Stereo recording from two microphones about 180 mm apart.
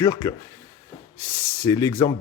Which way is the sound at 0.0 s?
20° left (ahead or behind).